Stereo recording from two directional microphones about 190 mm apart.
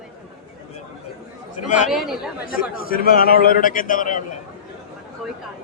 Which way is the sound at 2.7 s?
50° left (ahead or behind).